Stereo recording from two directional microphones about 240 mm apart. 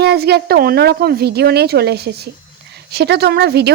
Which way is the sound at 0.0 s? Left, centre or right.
Right.